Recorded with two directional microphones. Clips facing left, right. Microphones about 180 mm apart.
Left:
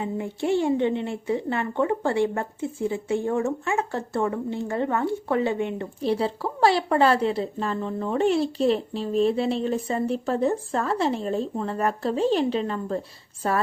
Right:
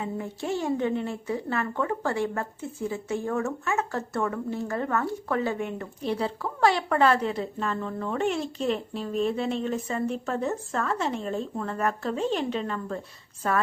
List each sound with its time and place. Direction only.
0.0 s a woman's voice: 25° left (ahead or behind)